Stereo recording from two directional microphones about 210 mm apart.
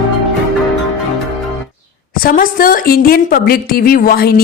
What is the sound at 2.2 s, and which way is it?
Speech, 40° left (ahead or behind).